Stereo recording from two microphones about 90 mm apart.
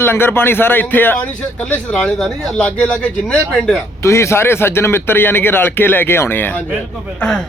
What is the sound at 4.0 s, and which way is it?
A man's voice, 30° left (ahead or behind).